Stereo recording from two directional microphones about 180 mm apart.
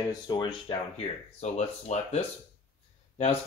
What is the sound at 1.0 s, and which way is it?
Speech, 40° left (ahead or behind).